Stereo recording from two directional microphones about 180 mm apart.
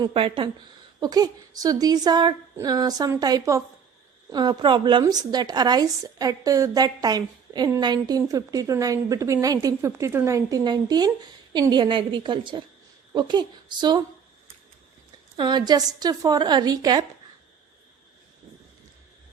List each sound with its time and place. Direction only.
0.0 s a woman's voice: 30° right (ahead or behind)
15.4 s a woman's voice: 25° right (ahead or behind)